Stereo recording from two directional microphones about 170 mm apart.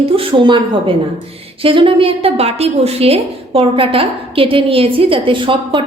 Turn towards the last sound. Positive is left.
turn(degrees=-30)  # may be behind; listen again after turning